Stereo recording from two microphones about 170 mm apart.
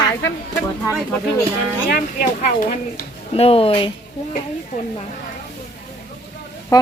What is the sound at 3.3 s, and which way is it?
Speech, 35° left (ahead or behind).